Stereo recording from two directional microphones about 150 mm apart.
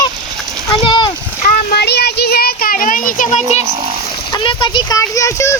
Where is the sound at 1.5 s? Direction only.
90° left; by 3.6 s 55° left (ahead or behind).